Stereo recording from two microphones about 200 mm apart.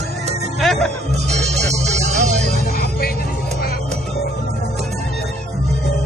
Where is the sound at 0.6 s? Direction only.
Centre (ahead or behind).